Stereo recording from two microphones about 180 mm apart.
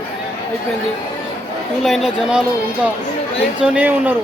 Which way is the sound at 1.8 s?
Centre (ahead or behind).